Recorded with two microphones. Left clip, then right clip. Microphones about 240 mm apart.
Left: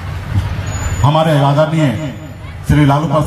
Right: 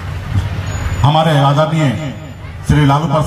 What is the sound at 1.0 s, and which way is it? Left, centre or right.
A man's voice, right.